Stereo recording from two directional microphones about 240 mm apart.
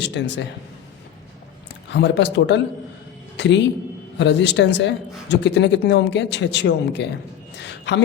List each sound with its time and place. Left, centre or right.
0.0 s speech: left
1.9 s a man's voice: left